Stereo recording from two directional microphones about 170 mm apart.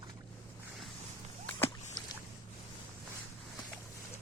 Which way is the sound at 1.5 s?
15° left (ahead or behind).